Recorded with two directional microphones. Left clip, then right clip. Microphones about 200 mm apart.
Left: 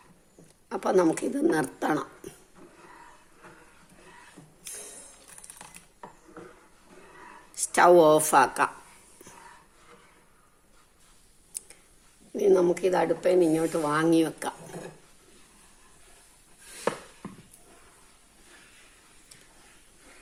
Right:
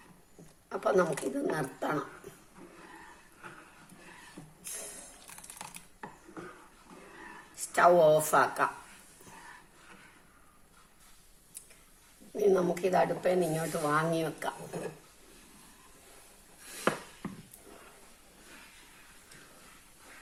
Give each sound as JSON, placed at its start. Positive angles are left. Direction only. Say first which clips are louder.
{"t": 0.7, "sound": "speech", "louder": "left 4 dB", "side_deg": 50}
{"t": 5.4, "sound": "typing", "louder": "right 2 dB", "side_deg": -5}
{"t": 7.7, "sound": "speech", "louder": "left 5 dB", "side_deg": 50}
{"t": 12.4, "sound": "speech", "louder": "left 5 dB", "side_deg": 45}